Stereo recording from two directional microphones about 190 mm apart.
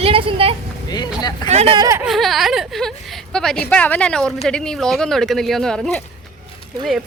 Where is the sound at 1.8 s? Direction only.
15° right (ahead or behind).